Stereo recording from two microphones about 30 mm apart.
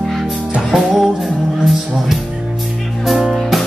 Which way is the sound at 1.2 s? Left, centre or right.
Centre.